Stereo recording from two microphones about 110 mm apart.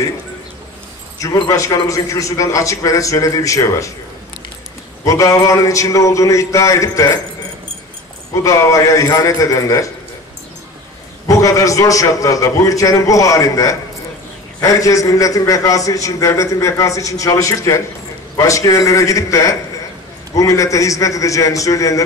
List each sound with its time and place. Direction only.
1.5 s a man's voice: 30° left (ahead or behind)
5.0 s a man's voice: 30° left (ahead or behind)
8.4 s a man's voice: 30° left (ahead or behind)
11.2 s a man's voice: 30° left (ahead or behind)